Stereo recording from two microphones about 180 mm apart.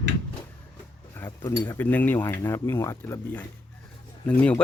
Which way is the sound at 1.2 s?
15° left (ahead or behind).